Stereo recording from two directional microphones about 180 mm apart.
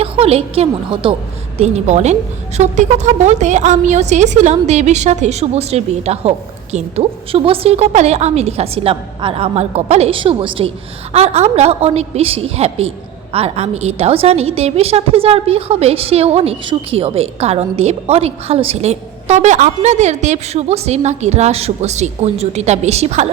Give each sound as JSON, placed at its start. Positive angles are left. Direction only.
{"t": 0.0, "sound": "a woman's voice", "side_deg": -35}